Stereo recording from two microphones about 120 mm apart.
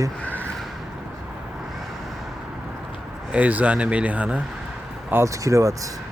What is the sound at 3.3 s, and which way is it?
Speech, 10° right (ahead or behind).